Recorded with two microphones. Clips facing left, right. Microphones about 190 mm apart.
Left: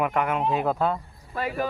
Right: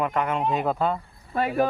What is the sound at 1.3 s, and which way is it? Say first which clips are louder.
Speech: right 5 dB; 50° right (ahead or behind).